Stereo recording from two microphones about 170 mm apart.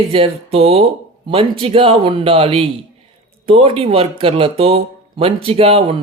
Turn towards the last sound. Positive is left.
turn(degrees=-35)  # may be behind; listen again after turning